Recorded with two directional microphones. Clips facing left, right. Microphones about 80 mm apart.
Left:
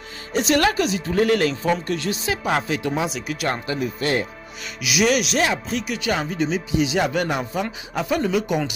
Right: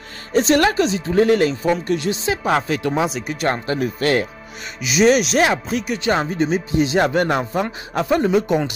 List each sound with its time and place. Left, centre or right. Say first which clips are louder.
0.3 s speech: right 4 dB; right
2.4 s speech: right 3 dB; right
4.0 s speech: right 5 dB; right
4.8 s speech: right 5 dB; right
5.9 s speech: right 5 dB; right
8.2 s speech: right 4 dB; right